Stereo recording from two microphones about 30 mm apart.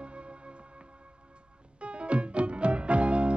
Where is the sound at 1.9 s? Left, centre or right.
Right.